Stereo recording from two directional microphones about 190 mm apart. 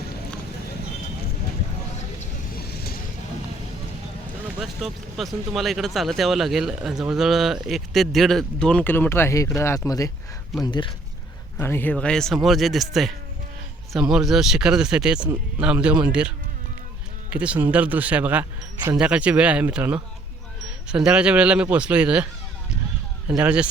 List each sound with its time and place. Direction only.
2.6 s vehicle: 55° left (ahead or behind)
4.6 s speech: centre (ahead or behind); by 10.9 s 25° left (ahead or behind)
11.5 s speech: 10° left (ahead or behind); by 16.3 s 5° right (ahead or behind)
17.3 s speech: 5° right (ahead or behind)
23.3 s speech: 5° right (ahead or behind)